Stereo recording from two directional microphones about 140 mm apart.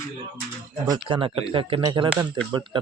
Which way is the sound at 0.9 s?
35° right (ahead or behind).